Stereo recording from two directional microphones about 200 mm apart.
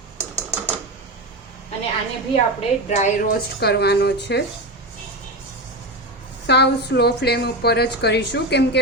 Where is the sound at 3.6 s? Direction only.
55° left (ahead or behind).